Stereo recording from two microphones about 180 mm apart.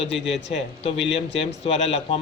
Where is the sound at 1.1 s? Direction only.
35° left (ahead or behind).